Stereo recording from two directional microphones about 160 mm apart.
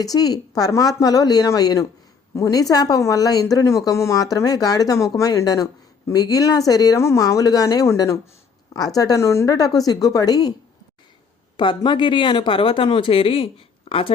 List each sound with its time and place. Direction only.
0.0 s speech: 25° left (ahead or behind)
11.5 s speech: 30° left (ahead or behind)